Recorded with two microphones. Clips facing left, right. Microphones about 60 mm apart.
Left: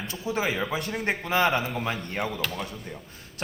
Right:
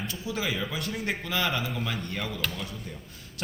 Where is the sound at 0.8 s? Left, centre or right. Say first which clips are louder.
Left 3 dB; left.